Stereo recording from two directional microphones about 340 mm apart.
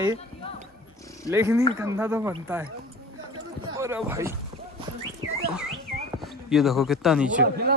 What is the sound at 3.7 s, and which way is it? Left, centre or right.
Speech, centre.